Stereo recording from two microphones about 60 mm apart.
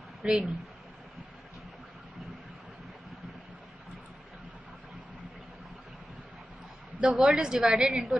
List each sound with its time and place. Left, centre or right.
0.2 s speech: centre
7.0 s a woman's voice: centre